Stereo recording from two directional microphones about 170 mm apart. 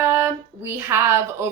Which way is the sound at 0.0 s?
15° right (ahead or behind).